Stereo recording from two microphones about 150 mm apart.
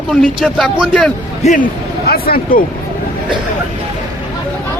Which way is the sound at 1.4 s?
60° left (ahead or behind).